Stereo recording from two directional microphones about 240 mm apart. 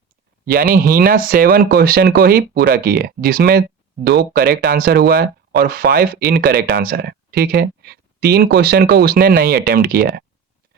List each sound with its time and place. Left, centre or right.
0.7 s speech: right